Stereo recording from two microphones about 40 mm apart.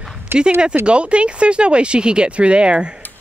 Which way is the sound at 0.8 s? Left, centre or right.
Right.